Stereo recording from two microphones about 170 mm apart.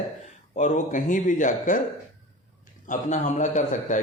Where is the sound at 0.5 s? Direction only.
45° left (ahead or behind).